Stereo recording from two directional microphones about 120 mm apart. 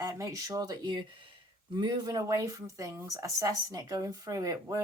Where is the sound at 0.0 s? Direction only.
25° right (ahead or behind).